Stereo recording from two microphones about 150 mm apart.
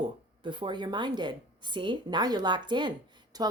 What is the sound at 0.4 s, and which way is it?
A woman's voice, 30° right (ahead or behind).